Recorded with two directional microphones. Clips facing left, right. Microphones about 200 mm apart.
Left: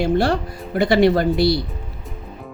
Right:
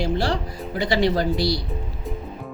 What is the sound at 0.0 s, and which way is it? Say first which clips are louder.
Speech: left 5 dB; 60° left (ahead or behind).